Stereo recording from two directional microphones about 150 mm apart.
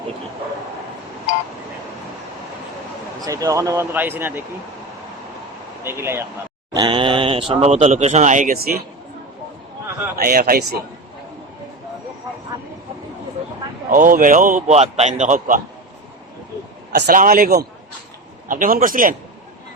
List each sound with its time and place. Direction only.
3.2 s speech: 20° right (ahead or behind)
5.8 s speech: 15° right (ahead or behind)
6.7 s speech: 30° right (ahead or behind); by 8.8 s 70° right (ahead or behind)
10.2 s a man's voice: 80° right
13.9 s a man's voice: 60° right (ahead or behind)
16.9 s a man's voice: 70° right (ahead or behind)
18.4 s a man's voice: 65° right (ahead or behind)